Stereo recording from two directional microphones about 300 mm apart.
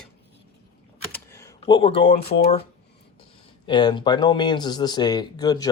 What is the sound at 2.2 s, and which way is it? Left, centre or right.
Speech, centre.